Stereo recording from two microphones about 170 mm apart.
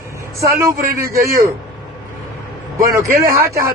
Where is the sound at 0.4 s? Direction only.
15° right (ahead or behind).